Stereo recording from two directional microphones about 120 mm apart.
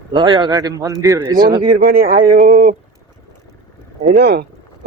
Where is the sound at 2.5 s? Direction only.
90° right.